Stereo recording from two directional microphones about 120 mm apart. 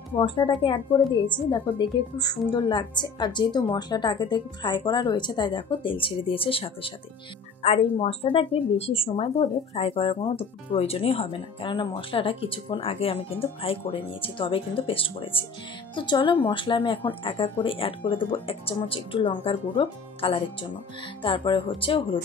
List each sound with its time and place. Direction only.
0.2 s speech: 45° left (ahead or behind)
7.6 s speech: 60° left (ahead or behind)